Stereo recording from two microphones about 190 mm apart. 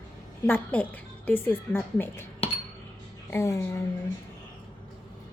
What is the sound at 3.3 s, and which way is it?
Speech, 15° left (ahead or behind).